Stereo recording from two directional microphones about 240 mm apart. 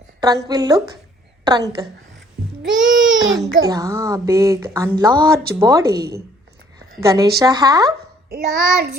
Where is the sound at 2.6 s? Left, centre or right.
Right.